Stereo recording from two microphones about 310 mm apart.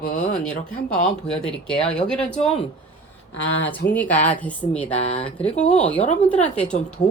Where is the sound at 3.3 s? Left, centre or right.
Left.